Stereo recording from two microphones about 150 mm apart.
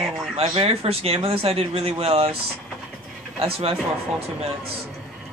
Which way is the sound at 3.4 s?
40° right (ahead or behind).